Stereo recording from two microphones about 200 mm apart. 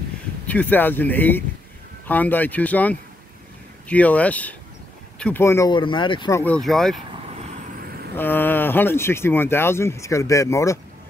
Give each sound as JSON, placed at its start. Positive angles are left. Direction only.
{"t": 0.5, "sound": "speech", "side_deg": 10}
{"t": 6.4, "sound": "speech", "side_deg": 5}
{"t": 7.1, "sound": "vehicle", "side_deg": -30}
{"t": 8.2, "sound": "speech", "side_deg": 10}